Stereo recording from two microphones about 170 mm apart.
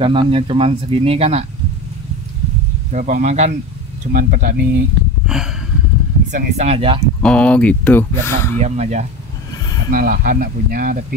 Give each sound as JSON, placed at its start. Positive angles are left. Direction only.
{"t": 0.0, "sound": "speech", "side_deg": -30}
{"t": 2.9, "sound": "speech", "side_deg": -45}
{"t": 5.2, "sound": "a sound", "side_deg": -5}
{"t": 6.3, "sound": "speech", "side_deg": -40}
{"t": 7.2, "sound": "speech", "side_deg": 5}
{"t": 8.5, "sound": "speech", "side_deg": -40}
{"t": 9.8, "sound": "speech", "side_deg": -55}